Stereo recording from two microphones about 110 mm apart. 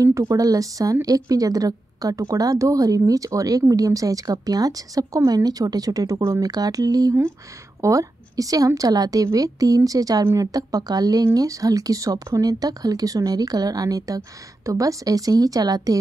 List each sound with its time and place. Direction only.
0.0 s speech: 30° right (ahead or behind)